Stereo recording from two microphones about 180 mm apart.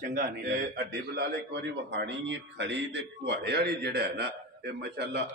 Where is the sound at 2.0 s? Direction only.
80° right.